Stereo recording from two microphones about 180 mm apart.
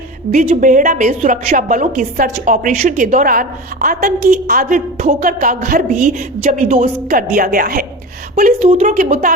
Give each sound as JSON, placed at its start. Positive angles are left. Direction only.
{"t": 0.3, "sound": "a woman's voice", "side_deg": -45}